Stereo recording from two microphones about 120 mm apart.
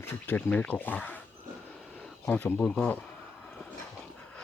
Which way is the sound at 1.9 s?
5° left (ahead or behind).